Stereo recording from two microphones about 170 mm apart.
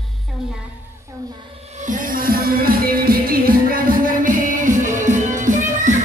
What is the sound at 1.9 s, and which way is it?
Music, 55° right (ahead or behind).